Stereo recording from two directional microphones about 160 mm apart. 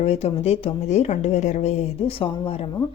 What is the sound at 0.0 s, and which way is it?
A woman's voice, 40° left (ahead or behind).